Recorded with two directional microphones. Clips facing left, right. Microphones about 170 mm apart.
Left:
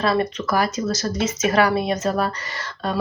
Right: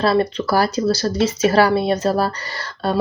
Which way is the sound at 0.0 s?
30° right (ahead or behind).